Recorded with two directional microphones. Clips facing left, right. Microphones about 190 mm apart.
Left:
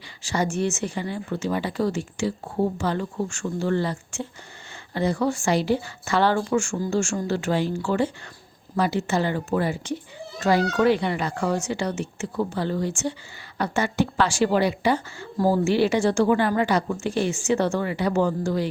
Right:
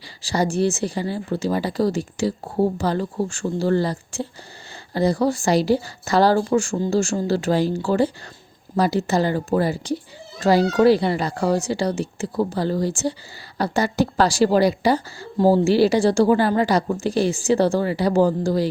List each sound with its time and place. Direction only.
0.2 s speech: 35° right (ahead or behind)